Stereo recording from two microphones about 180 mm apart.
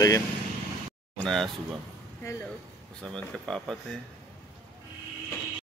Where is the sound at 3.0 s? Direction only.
5° left (ahead or behind).